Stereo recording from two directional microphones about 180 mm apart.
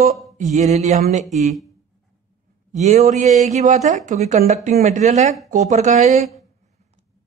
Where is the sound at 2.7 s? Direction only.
40° right (ahead or behind).